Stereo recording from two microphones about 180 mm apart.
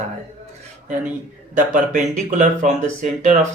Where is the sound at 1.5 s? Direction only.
45° right (ahead or behind).